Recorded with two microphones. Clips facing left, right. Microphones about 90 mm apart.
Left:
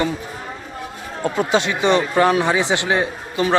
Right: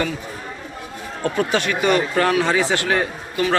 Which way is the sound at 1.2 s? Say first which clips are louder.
Left 2 dB; 20° left (ahead or behind).